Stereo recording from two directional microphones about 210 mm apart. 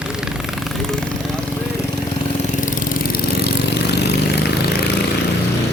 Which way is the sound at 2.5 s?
40° left (ahead or behind).